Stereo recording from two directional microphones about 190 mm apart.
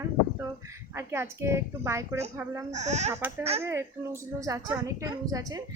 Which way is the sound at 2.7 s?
40° right (ahead or behind).